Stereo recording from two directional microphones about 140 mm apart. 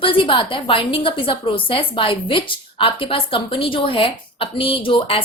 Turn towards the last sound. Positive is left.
turn(degrees=40)  # may be behind; listen again after turning